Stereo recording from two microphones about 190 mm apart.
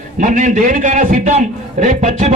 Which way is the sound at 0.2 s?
40° right (ahead or behind).